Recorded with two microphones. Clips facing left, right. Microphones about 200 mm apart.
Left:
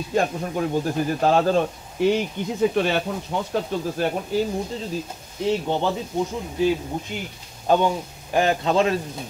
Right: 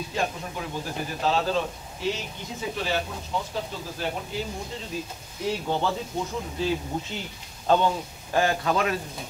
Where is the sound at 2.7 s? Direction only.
60° left (ahead or behind).